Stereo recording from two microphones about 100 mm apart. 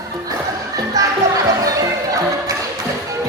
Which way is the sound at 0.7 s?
35° right (ahead or behind).